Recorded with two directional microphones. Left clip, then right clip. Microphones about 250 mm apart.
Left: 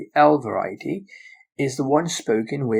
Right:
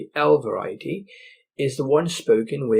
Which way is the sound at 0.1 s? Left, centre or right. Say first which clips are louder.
Left 2 dB; centre.